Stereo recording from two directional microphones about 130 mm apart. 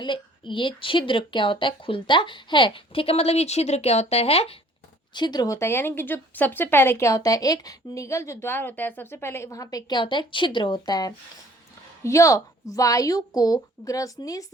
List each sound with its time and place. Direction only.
0.0 s a woman's voice: 40° left (ahead or behind)
5.1 s speech: 35° left (ahead or behind)